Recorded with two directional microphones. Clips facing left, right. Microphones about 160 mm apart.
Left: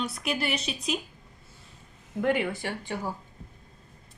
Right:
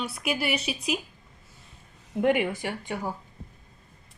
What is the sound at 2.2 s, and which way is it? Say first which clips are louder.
Speech: right 3 dB; 20° right (ahead or behind).